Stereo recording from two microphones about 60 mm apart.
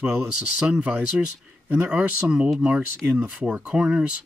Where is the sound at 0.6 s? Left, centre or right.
Centre.